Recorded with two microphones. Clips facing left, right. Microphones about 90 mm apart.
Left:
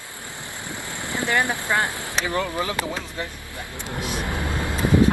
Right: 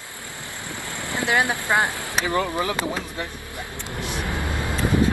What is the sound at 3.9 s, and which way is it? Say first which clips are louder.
Vehicle: left 1 dB; 20° left (ahead or behind).